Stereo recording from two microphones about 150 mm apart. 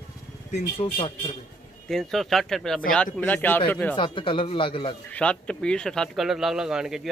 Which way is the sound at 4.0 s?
35° left (ahead or behind).